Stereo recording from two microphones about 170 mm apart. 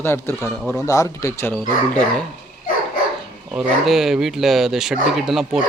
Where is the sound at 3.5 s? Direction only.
Centre (ahead or behind).